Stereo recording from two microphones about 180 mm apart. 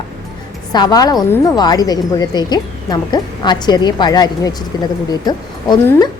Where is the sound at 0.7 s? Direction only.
20° left (ahead or behind).